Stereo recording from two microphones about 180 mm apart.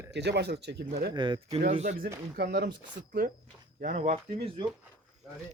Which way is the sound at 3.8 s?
45° right (ahead or behind).